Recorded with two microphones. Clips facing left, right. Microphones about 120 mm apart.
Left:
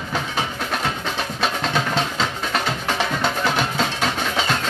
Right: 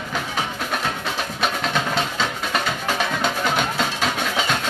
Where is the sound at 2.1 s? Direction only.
5° right (ahead or behind).